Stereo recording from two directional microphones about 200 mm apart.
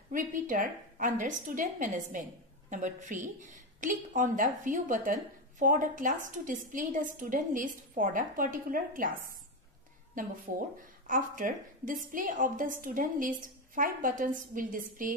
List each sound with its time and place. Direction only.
0.1 s a woman's voice: 40° right (ahead or behind)